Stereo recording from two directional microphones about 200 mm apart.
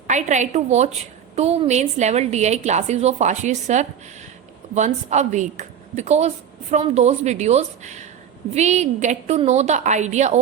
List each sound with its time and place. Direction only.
0.1 s a woman's voice: 35° right (ahead or behind)